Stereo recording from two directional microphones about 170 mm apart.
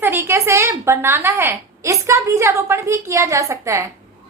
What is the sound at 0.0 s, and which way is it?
A woman's voice, 15° right (ahead or behind).